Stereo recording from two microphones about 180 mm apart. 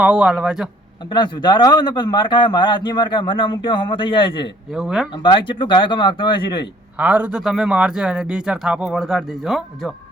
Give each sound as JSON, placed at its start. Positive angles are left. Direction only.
{"t": 0.0, "sound": "a man's voice", "side_deg": -5}
{"t": 1.1, "sound": "speech", "side_deg": 25}
{"t": 4.7, "sound": "a man's voice", "side_deg": -5}
{"t": 5.1, "sound": "speech", "side_deg": 25}
{"t": 6.9, "sound": "a man's voice", "side_deg": -10}